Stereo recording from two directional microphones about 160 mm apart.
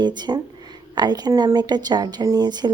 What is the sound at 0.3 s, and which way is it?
Speech, 30° right (ahead or behind).